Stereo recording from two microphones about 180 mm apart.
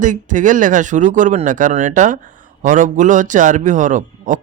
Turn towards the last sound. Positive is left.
turn(degrees=-45)  # may be behind; listen again after turning